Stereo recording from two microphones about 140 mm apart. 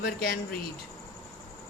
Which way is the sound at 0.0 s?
90° left.